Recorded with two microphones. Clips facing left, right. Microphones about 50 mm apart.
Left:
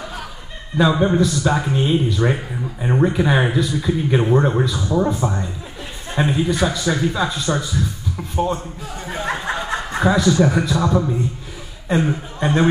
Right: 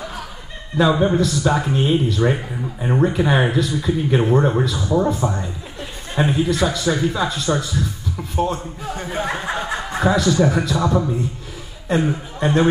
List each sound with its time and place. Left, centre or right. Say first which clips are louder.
0.7 s speech: even; centre
4.7 s speech: right 1 dB; centre
5.0 s speech: even; centre
9.1 s a sound: left 1 dB; centre
9.9 s a man's voice: left 1 dB; centre